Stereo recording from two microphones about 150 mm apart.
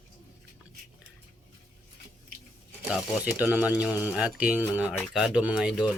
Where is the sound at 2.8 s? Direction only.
10° right (ahead or behind).